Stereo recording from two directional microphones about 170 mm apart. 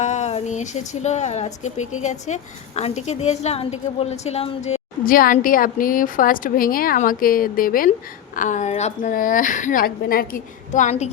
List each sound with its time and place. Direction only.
0.0 s a woman's voice: 40° left (ahead or behind)
5.0 s a woman's voice: 55° left (ahead or behind)